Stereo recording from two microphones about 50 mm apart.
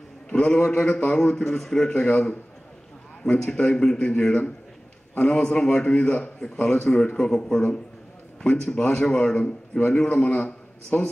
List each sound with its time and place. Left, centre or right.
0.3 s a man's voice: centre
1.4 s speech: centre
3.5 s a man's voice: centre
5.1 s a man's voice: left